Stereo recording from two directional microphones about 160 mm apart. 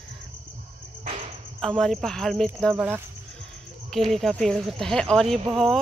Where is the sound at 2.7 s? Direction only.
15° right (ahead or behind).